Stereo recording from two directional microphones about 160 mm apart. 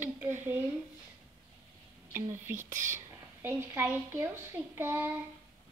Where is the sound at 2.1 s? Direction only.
15° right (ahead or behind).